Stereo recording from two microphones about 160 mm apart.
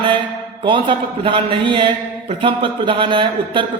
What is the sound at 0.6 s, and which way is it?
A man's voice, 30° right (ahead or behind).